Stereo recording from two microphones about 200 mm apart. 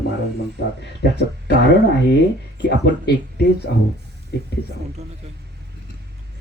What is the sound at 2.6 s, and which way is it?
Speech, 60° left (ahead or behind).